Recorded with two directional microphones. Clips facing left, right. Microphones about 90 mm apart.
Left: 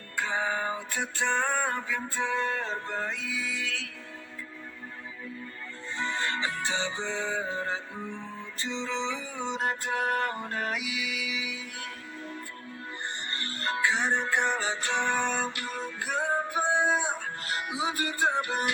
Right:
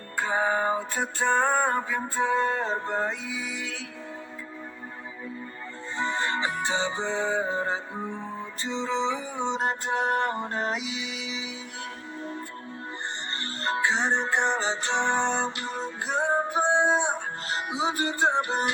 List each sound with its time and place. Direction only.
0.2 s music: 35° right (ahead or behind)
6.0 s music: 30° right (ahead or behind)
13.3 s music: 30° right (ahead or behind)